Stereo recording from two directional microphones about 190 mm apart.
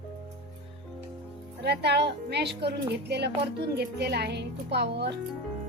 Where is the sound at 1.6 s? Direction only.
60° right (ahead or behind).